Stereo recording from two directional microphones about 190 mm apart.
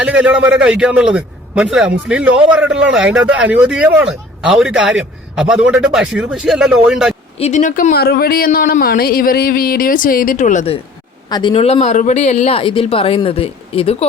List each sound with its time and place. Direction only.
0.0 s speech: 5° right (ahead or behind)
7.3 s speech: 35° left (ahead or behind)
11.3 s speech: 20° left (ahead or behind)
11.5 s speech: 35° left (ahead or behind)